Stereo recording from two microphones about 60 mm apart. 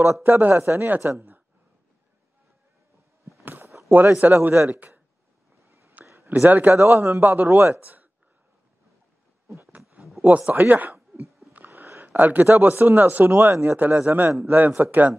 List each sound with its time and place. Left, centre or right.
0.2 s speech: right
3.9 s speech: right
5.7 s a sound: right
6.4 s speech: right
7.8 s a sound: right
10.2 s speech: right
11.2 s a sound: centre
11.5 s speech: right
13.4 s speech: right
13.7 s speech: right